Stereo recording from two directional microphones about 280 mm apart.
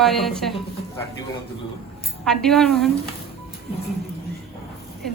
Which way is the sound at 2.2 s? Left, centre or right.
Centre.